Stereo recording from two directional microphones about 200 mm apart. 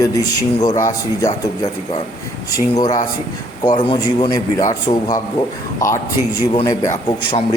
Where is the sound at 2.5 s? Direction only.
20° left (ahead or behind).